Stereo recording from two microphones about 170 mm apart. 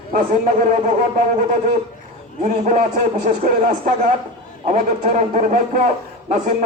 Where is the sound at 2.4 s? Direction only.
50° right (ahead or behind).